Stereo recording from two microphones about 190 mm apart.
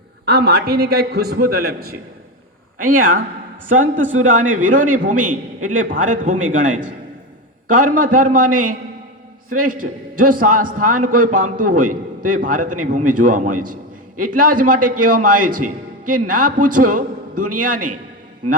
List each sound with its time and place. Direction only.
0.3 s a man's voice: 55° right (ahead or behind); by 6.8 s 40° right (ahead or behind)
7.9 s a man's voice: 45° right (ahead or behind)
10.2 s a man's voice: 45° right (ahead or behind)